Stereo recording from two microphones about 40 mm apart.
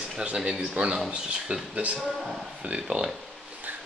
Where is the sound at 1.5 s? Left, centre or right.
Right.